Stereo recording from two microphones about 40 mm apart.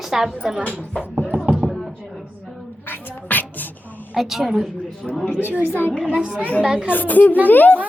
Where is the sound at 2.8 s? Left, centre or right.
Left.